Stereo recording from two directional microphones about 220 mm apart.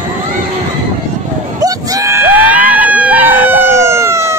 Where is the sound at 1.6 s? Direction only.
15° right (ahead or behind).